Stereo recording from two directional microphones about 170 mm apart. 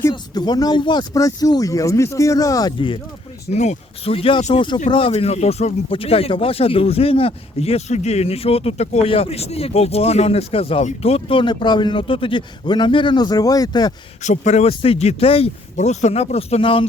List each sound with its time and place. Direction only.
0.1 s speech: 25° left (ahead or behind)
3.5 s speech: 40° left (ahead or behind); by 13.9 s 20° left (ahead or behind)
14.3 s speech: 45° left (ahead or behind)